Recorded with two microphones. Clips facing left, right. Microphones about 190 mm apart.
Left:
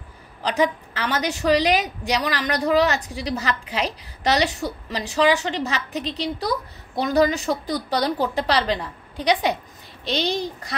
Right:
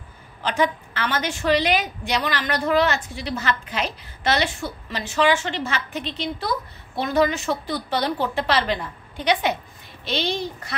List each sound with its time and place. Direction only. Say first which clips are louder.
0.4 s a woman's voice: left 1 dB; 35° left (ahead or behind)